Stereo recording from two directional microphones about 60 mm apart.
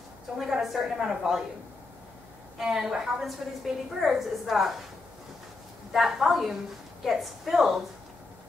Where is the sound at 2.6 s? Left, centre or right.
Centre.